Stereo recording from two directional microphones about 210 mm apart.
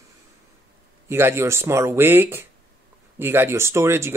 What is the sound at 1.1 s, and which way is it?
Speech, 10° right (ahead or behind).